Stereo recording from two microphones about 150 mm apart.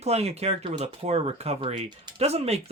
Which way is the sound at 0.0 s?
45° right (ahead or behind).